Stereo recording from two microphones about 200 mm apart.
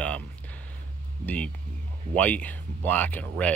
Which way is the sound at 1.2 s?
5° left (ahead or behind).